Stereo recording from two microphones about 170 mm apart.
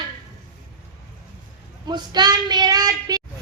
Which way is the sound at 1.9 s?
25° right (ahead or behind).